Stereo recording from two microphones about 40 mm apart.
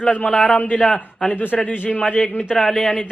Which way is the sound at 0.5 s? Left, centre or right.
Left.